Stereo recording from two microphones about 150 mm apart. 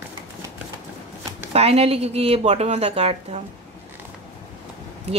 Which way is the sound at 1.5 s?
45° right (ahead or behind).